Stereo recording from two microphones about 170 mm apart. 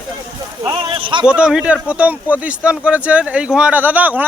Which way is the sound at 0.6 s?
30° right (ahead or behind).